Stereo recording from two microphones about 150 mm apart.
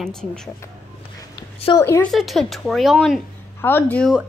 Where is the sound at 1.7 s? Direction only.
20° left (ahead or behind).